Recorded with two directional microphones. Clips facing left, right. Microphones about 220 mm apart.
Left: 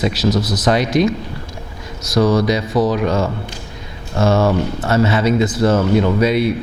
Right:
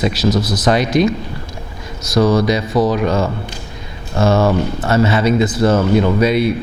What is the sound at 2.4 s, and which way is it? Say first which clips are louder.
Speech: right 1 dB; 15° right (ahead or behind).